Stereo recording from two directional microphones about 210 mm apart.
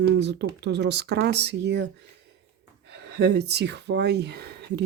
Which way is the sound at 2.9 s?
50° right (ahead or behind).